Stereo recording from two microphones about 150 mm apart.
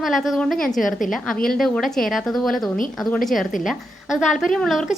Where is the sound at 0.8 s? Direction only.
60° left (ahead or behind).